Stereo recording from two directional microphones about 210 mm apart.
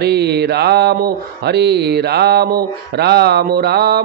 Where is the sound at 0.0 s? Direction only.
50° right (ahead or behind).